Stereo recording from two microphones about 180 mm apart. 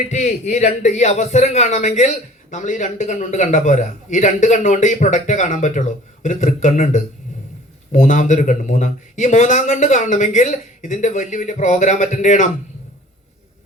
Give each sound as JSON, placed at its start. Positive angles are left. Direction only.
{"t": 0.1, "sound": "speech", "side_deg": 40}